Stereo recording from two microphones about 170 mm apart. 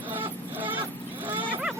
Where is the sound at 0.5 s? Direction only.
10° right (ahead or behind).